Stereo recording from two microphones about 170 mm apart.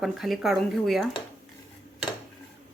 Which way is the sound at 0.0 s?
Centre (ahead or behind).